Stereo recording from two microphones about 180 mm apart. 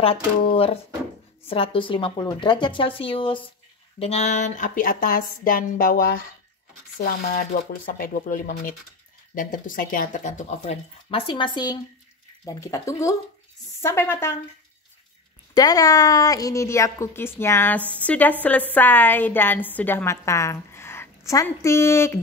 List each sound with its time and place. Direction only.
0.0 s a woman's voice: 30° left (ahead or behind); by 14.3 s 15° left (ahead or behind)
15.5 s a woman's voice: 20° left (ahead or behind)